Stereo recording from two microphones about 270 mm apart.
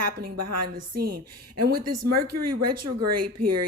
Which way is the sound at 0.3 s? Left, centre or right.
Right.